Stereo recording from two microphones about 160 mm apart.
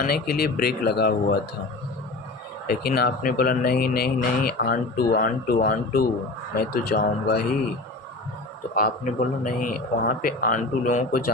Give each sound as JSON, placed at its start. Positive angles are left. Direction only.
{"t": 0.0, "sound": "speech", "side_deg": 75}
{"t": 2.6, "sound": "speech", "side_deg": 75}
{"t": 5.1, "sound": "a man's voice", "side_deg": 55}
{"t": 8.7, "sound": "a man's voice", "side_deg": 60}